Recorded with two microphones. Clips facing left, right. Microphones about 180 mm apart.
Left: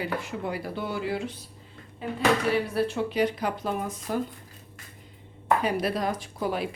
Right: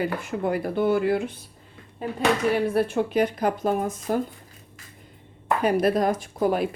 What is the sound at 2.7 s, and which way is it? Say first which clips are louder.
Speech: right 4 dB; 50° right (ahead or behind).